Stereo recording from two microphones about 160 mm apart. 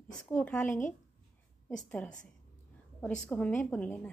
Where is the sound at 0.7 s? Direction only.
55° left (ahead or behind).